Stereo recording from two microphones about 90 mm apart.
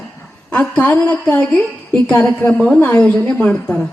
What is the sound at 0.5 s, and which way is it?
A woman's voice, 15° left (ahead or behind).